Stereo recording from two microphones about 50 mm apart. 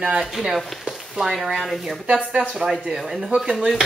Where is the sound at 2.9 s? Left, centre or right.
Centre.